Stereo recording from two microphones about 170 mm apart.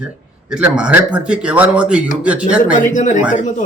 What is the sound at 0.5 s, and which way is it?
A man's voice, 5° right (ahead or behind).